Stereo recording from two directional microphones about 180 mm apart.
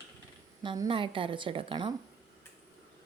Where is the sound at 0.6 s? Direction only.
25° right (ahead or behind).